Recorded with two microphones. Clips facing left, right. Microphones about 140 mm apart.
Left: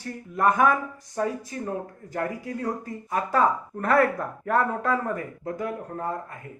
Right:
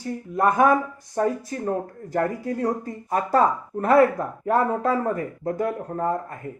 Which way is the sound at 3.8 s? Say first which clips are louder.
Right 4 dB; 30° right (ahead or behind).